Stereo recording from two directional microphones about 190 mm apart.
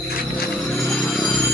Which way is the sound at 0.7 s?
5° left (ahead or behind).